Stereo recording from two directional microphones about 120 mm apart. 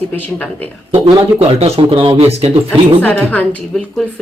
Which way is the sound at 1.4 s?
60° right (ahead or behind).